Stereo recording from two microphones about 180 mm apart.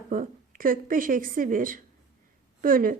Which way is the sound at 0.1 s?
50° right (ahead or behind).